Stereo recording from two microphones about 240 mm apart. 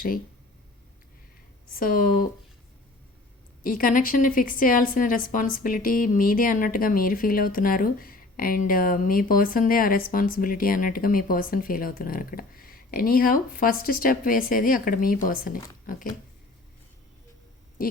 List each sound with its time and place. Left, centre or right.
1.8 s a woman's voice: left
3.6 s a woman's voice: left